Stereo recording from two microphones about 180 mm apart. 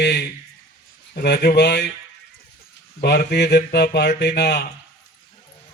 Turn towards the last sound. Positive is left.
turn(degrees=65)  # may be behind; listen again after turning